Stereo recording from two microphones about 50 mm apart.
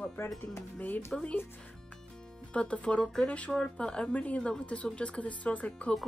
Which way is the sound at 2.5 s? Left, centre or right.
Left.